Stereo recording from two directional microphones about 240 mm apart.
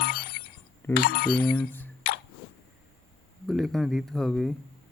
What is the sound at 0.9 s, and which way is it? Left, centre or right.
Speech, left.